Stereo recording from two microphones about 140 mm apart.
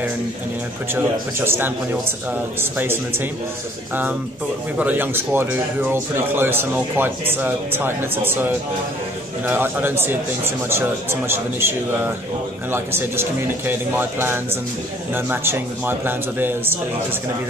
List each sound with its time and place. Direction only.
0.9 s speech: 15° right (ahead or behind)
4.7 s speech: 10° right (ahead or behind)
12.7 s speech: 15° right (ahead or behind)